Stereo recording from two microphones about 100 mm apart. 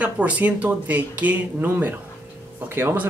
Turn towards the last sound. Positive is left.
turn(degrees=-20)  # may be behind; listen again after turning